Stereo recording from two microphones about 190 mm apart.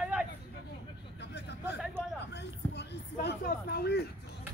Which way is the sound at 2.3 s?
65° left (ahead or behind).